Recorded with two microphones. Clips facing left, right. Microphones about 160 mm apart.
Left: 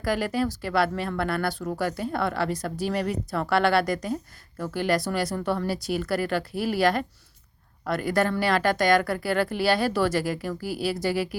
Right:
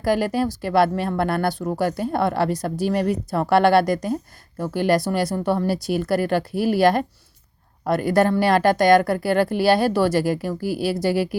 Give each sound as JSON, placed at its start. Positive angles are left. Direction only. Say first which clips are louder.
{"t": 0.0, "sound": "speech", "louder": "right 5 dB", "side_deg": -40}
{"t": 5.9, "sound": "speech", "louder": "right 5 dB", "side_deg": -40}